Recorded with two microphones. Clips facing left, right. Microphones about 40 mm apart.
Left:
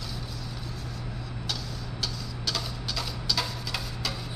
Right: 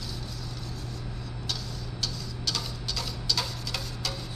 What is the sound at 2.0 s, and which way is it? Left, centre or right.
Tick-tock, centre.